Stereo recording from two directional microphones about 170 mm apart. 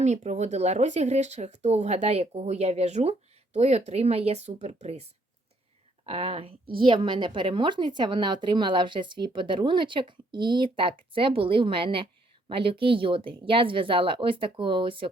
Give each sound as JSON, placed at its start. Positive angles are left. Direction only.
{"t": 0.0, "sound": "speech", "side_deg": -45}
{"t": 6.1, "sound": "a woman's voice", "side_deg": -35}